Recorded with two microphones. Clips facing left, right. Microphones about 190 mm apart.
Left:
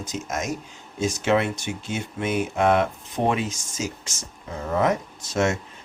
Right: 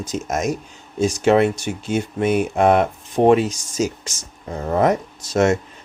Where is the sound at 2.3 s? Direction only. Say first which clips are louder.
Right 5 dB; 60° right (ahead or behind).